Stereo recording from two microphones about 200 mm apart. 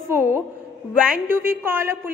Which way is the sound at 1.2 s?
10° right (ahead or behind).